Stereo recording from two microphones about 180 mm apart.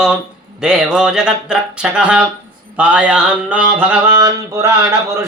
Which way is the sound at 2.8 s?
5° right (ahead or behind).